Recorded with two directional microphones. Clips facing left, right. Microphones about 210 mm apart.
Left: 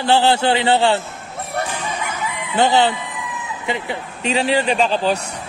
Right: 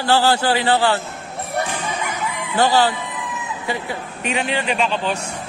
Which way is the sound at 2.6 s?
20° left (ahead or behind).